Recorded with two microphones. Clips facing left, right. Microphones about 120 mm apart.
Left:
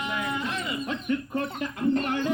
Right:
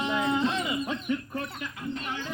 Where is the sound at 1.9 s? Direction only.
55° left (ahead or behind).